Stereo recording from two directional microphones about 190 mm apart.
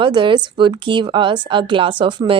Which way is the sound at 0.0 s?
25° right (ahead or behind).